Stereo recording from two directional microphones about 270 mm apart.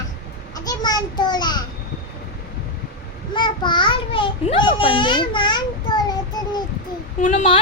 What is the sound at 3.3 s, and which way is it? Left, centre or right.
Babbling, centre.